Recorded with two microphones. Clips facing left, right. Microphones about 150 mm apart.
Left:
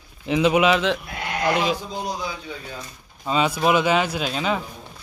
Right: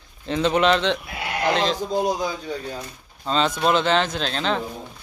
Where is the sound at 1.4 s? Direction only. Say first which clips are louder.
Even; 10° left (ahead or behind).